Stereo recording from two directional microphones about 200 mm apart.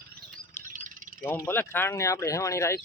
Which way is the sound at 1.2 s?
10° left (ahead or behind).